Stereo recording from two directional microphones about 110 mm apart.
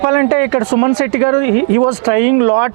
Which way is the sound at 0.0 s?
20° right (ahead or behind).